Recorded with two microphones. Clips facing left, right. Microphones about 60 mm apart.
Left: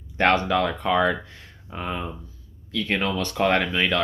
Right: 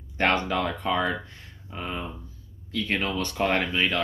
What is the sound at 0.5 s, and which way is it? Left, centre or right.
Speech, left.